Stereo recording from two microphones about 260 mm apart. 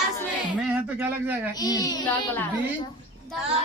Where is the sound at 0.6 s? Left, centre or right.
Centre.